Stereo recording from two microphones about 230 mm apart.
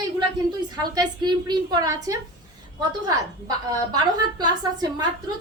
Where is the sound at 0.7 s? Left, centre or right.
Centre.